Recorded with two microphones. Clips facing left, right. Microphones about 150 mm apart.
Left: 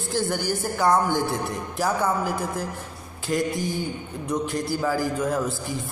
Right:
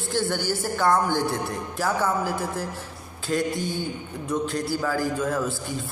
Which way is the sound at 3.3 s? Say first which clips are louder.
Left 1 dB; 15° left (ahead or behind).